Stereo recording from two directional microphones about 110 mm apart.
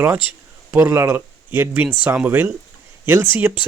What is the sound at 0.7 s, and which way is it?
Speech, 25° right (ahead or behind).